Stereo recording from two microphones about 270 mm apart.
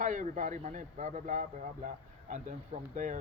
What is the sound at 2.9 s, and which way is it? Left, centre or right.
Speech, right.